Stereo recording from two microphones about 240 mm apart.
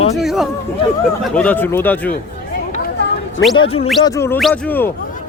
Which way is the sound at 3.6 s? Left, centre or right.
Left.